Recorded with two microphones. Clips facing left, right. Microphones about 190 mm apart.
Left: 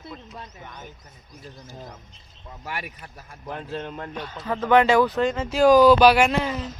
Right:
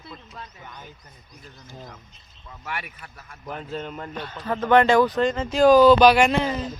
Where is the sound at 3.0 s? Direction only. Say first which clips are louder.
Left 1 dB; 15° left (ahead or behind).